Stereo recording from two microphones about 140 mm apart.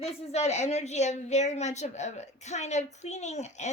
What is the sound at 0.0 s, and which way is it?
A woman's voice, 50° left (ahead or behind).